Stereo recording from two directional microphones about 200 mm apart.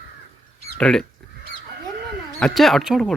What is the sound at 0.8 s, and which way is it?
Speech, 5° left (ahead or behind).